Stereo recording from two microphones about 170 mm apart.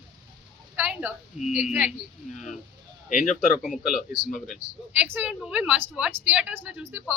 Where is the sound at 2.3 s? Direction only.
45° left (ahead or behind).